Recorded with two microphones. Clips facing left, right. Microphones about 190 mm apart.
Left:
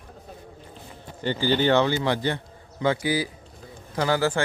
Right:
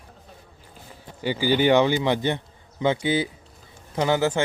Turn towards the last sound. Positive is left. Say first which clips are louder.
# right 1 dB
turn(degrees=-20)  # may be behind; listen again after turning